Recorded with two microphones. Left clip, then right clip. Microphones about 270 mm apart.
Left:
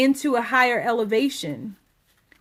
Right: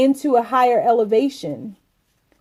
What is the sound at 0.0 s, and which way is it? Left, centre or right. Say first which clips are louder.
Speech: right 5 dB; left.